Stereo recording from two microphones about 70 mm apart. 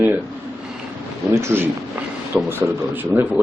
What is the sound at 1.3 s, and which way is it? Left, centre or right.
A man's voice, right.